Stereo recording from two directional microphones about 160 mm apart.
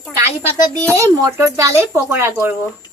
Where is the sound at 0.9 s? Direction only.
20° right (ahead or behind).